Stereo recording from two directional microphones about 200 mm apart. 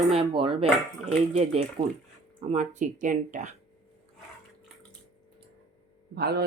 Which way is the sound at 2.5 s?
35° right (ahead or behind).